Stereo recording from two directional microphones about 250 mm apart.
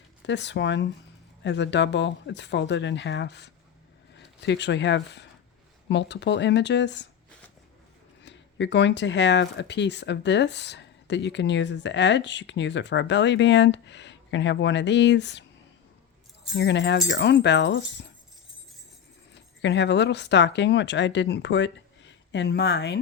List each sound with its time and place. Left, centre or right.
0.3 s speech: left
8.2 s speech: left
16.6 s speech: left
19.3 s speech: left